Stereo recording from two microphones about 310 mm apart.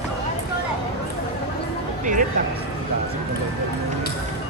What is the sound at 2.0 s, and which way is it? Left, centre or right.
Music, right.